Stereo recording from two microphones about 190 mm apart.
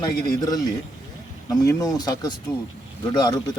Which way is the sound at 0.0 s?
20° left (ahead or behind).